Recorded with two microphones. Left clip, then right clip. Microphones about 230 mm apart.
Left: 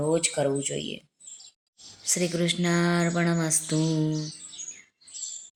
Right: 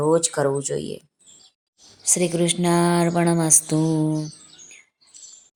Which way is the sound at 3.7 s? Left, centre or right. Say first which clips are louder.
Right 5 dB; centre.